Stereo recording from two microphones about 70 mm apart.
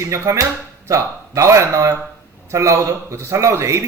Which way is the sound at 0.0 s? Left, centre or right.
Right.